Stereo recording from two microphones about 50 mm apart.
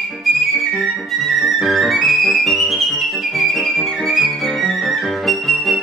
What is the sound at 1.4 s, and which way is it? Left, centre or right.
Music, centre.